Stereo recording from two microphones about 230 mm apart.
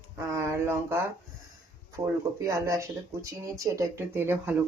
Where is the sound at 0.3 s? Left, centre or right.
Centre.